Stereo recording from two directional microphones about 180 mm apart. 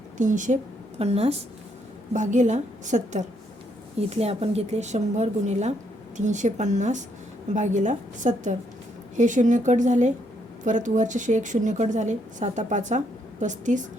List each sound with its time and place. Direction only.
0.2 s a woman's voice: 45° right (ahead or behind)